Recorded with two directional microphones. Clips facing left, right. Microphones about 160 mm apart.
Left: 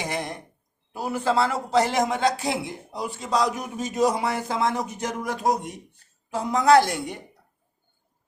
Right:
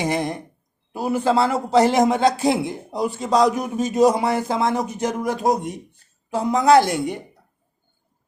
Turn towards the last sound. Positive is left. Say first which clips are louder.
# right 3 dB
turn(degrees=-20)  # may be behind; listen again after turning